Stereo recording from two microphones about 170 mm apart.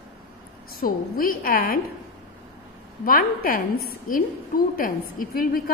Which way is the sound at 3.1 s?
55° left (ahead or behind).